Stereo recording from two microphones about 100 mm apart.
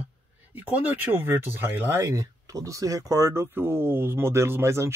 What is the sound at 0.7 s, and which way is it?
Speech, 15° right (ahead or behind).